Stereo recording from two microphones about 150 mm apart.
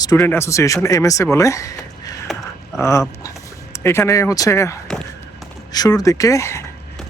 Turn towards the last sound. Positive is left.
turn(degrees=20)  # may be behind; listen again after turning